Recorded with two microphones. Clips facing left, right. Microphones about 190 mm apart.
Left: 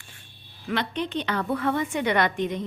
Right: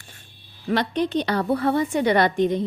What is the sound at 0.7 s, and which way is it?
A woman's voice, 40° right (ahead or behind).